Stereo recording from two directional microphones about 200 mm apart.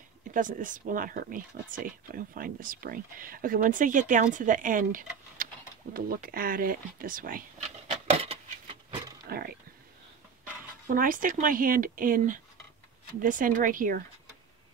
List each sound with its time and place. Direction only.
0.3 s speech: 40° right (ahead or behind)
7.9 s a sound: 30° right (ahead or behind)
9.3 s speech: 50° right (ahead or behind)
10.9 s speech: 40° right (ahead or behind)